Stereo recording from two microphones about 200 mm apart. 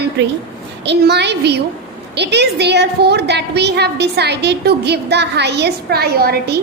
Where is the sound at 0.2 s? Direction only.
60° right (ahead or behind).